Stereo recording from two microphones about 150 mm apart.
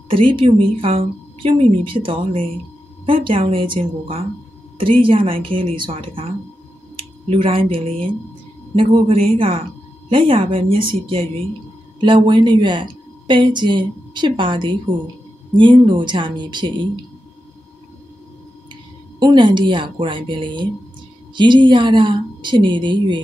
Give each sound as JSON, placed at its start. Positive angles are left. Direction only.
{"t": 0.1, "sound": "a woman's voice", "side_deg": -35}
{"t": 18.7, "sound": "a woman's voice", "side_deg": -30}